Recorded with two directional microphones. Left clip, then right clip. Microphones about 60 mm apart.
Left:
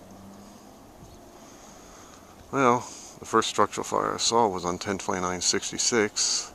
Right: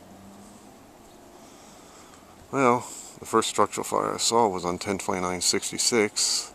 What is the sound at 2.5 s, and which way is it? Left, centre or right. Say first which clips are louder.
Speech: even; right.